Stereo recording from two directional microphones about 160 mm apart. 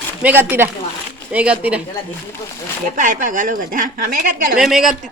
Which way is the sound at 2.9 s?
55° right (ahead or behind).